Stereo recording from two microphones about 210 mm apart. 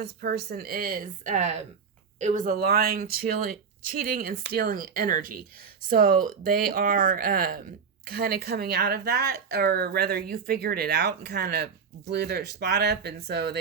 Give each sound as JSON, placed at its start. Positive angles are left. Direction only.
{"t": 0.0, "sound": "speech", "side_deg": -50}